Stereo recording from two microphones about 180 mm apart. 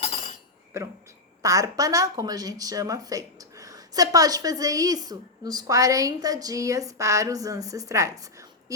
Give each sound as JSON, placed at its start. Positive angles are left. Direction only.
{"t": 0.7, "sound": "a woman's voice", "side_deg": -15}